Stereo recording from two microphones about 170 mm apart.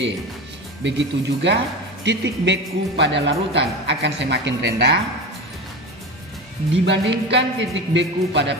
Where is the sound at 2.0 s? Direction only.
90° right.